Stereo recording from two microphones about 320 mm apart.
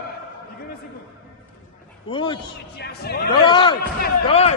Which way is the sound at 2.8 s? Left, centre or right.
Left.